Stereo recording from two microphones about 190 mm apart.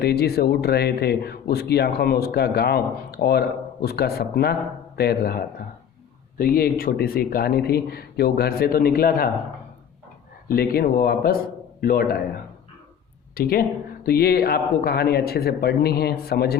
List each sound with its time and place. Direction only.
0.0 s a man's voice: 55° left (ahead or behind)
10.5 s a man's voice: 55° left (ahead or behind)
13.3 s speech: 50° left (ahead or behind)